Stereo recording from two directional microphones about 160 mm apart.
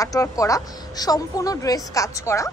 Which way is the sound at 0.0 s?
20° left (ahead or behind).